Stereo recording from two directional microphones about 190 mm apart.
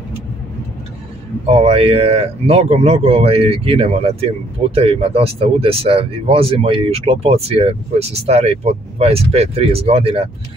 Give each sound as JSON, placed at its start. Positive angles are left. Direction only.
{"t": 1.4, "sound": "speech", "side_deg": -35}